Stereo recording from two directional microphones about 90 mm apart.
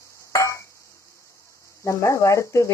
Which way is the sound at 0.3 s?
35° left (ahead or behind).